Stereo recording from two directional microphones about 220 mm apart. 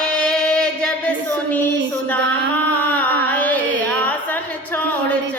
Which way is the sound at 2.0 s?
5° left (ahead or behind).